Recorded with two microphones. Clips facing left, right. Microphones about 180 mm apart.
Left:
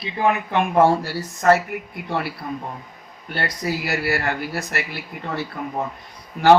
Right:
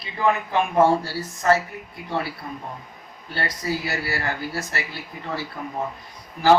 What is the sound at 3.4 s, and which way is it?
Speech, 70° left (ahead or behind).